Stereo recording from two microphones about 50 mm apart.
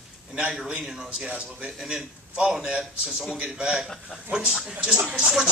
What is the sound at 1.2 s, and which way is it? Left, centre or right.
Speech, right.